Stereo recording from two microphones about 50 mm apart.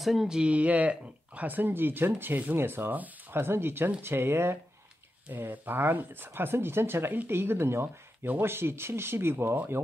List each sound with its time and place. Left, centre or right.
0.0 s speech: centre
0.4 s speech: right
3.3 s speech: right
5.3 s speech: right